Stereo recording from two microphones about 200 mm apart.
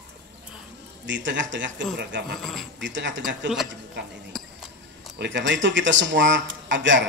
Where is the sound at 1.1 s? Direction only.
65° right (ahead or behind).